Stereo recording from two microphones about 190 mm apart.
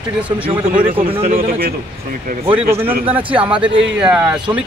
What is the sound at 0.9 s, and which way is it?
Speech, 30° right (ahead or behind).